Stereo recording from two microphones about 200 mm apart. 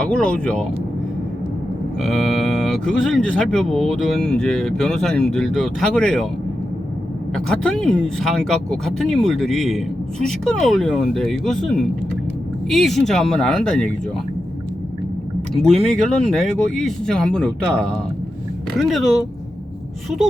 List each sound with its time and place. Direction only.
0.0 s speech: 5° left (ahead or behind)
2.0 s speech: centre (ahead or behind)
7.3 s speech: 5° left (ahead or behind)
15.6 s speech: 5° left (ahead or behind)